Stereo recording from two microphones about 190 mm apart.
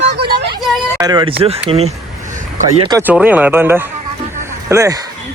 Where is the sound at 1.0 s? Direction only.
20° right (ahead or behind).